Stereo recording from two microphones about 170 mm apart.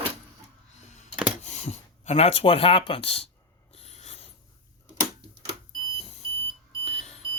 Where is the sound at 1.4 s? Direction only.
40° left (ahead or behind).